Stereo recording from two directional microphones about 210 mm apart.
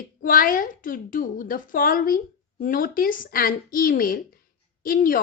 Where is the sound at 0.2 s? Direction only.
40° left (ahead or behind).